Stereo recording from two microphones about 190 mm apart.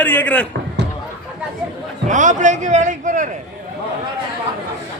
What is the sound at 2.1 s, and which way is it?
A man's voice, 40° right (ahead or behind).